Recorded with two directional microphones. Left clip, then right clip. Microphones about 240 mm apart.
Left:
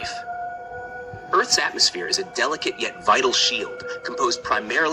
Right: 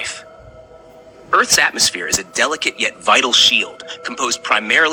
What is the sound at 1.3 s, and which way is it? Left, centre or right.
A man's voice, right.